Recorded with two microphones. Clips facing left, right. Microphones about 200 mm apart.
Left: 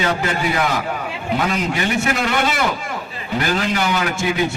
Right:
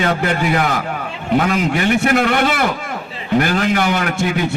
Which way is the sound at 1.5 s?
50° right (ahead or behind).